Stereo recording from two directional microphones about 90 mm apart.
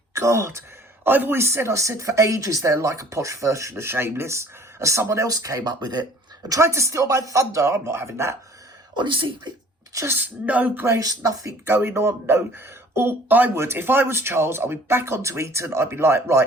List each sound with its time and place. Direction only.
0.1 s speech: 30° right (ahead or behind); by 6.1 s 50° right (ahead or behind)
6.5 s speech: 35° right (ahead or behind)
9.0 s speech: 60° right (ahead or behind)
9.9 s speech: 35° right (ahead or behind)
10.2 s speech: 15° right (ahead or behind)
10.8 s speech: 35° right (ahead or behind)
11.6 s speech: 25° right (ahead or behind)